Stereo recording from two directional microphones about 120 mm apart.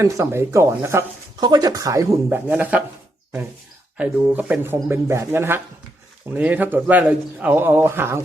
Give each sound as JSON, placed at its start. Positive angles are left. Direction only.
{"t": 0.0, "sound": "speech", "side_deg": -20}
{"t": 1.4, "sound": "speech", "side_deg": -35}
{"t": 2.3, "sound": "a man's voice", "side_deg": -15}
{"t": 3.9, "sound": "a man's voice", "side_deg": -10}